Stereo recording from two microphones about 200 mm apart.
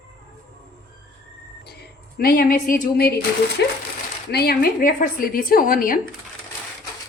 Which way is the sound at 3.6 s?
60° left (ahead or behind).